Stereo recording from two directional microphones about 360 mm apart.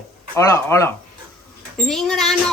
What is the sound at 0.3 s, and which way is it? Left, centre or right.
Laughter, centre.